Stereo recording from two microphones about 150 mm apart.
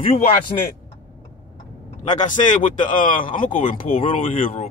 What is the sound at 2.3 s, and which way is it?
Speech, 55° left (ahead or behind).